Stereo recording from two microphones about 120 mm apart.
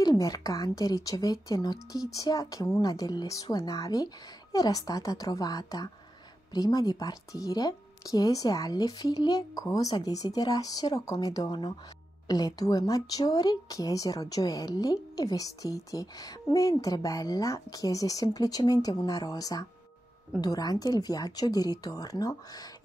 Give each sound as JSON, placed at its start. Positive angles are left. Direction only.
{"t": 0.0, "sound": "a woman's voice", "side_deg": 30}